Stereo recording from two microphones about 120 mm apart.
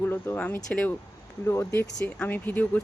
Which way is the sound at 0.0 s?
15° left (ahead or behind).